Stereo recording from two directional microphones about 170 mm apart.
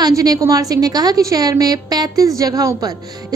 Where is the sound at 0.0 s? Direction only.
20° right (ahead or behind).